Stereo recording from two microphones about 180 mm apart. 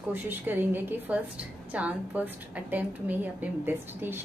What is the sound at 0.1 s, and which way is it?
A woman's voice, 10° right (ahead or behind).